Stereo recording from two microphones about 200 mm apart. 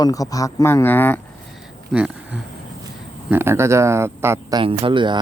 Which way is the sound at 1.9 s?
5° right (ahead or behind).